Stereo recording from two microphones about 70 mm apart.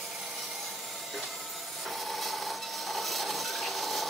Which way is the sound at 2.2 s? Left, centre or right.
Centre.